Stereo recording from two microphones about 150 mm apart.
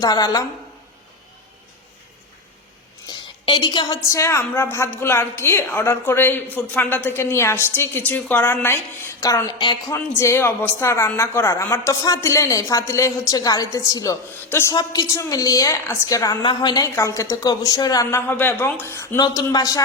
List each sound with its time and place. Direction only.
0.0 s speech: 25° left (ahead or behind)
3.1 s a woman's voice: 30° left (ahead or behind)